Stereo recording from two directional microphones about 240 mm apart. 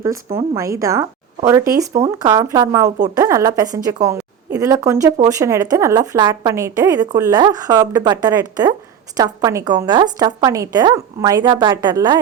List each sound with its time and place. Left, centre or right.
0.5 s a woman's voice: centre